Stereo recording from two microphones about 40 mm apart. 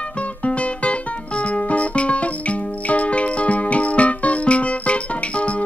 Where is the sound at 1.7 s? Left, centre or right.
Left.